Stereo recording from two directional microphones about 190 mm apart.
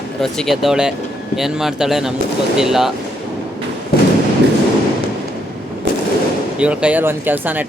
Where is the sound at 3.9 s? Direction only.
55° left (ahead or behind).